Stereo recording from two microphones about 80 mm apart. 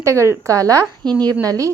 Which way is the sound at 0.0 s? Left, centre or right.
Right.